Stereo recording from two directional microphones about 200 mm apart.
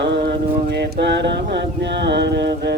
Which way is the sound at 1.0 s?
60° right (ahead or behind).